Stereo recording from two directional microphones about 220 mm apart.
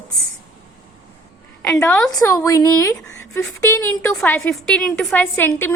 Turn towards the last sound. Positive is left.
turn(degrees=10)  # may be behind; listen again after turning